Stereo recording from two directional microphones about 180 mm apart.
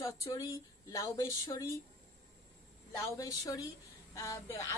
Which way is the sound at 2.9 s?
20° left (ahead or behind).